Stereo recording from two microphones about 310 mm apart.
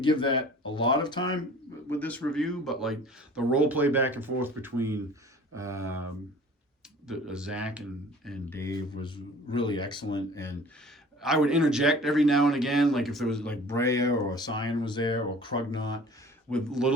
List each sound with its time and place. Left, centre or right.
0.0 s speech: centre
7.1 s speech: centre
11.2 s speech: centre
16.5 s speech: centre